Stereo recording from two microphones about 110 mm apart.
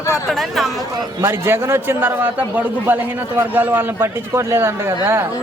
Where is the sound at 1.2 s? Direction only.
25° right (ahead or behind).